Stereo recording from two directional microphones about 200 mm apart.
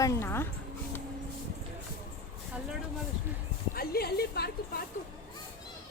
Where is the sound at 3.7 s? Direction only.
50° left (ahead or behind).